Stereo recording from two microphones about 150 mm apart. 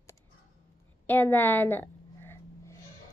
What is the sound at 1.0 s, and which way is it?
A woman's voice, 15° left (ahead or behind).